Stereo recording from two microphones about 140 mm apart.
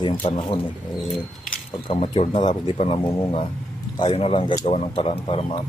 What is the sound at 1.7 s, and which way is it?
Speech, 40° left (ahead or behind).